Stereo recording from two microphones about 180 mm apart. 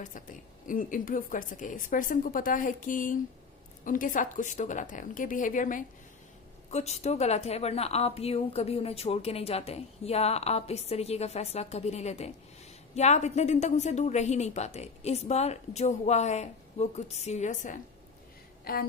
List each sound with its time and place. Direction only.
0.7 s a woman's voice: 50° left (ahead or behind)
6.7 s a woman's voice: 35° left (ahead or behind)
18.6 s a sound: 55° left (ahead or behind)